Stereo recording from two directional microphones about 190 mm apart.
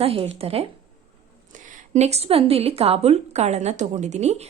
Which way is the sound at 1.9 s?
35° right (ahead or behind).